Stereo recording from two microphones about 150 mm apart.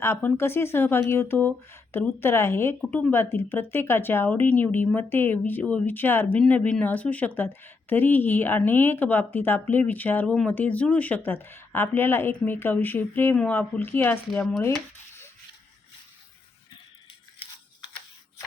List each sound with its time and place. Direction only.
0.0 s speech: 15° left (ahead or behind)
14.3 s speech: centre (ahead or behind)